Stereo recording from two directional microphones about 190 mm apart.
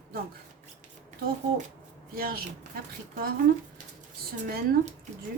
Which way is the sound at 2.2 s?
50° right (ahead or behind).